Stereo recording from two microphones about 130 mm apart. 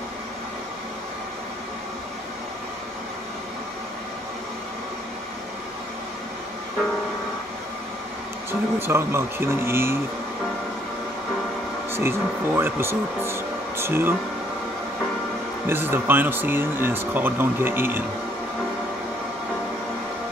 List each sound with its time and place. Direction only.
8.5 s speech: 20° right (ahead or behind)
11.9 s speech: 20° right (ahead or behind)
15.6 s speech: 15° right (ahead or behind)